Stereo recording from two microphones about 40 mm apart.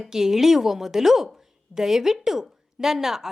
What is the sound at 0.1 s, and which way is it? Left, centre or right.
A woman's voice, centre.